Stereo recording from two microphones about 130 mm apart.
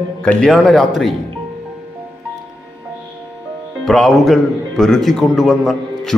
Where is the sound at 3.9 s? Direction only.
Centre (ahead or behind).